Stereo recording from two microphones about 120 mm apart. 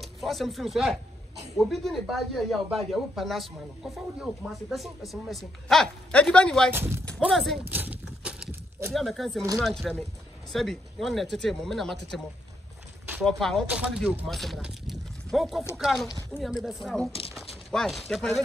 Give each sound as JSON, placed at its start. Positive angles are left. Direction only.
{"t": 0.0, "sound": "speech", "side_deg": 0}
{"t": 6.7, "sound": "speech", "side_deg": -20}
{"t": 7.2, "sound": "speech", "side_deg": 0}
{"t": 7.7, "sound": "horse", "side_deg": -15}
{"t": 8.9, "sound": "speech", "side_deg": 0}
{"t": 13.2, "sound": "speech", "side_deg": 5}
{"t": 13.7, "sound": "speech", "side_deg": -10}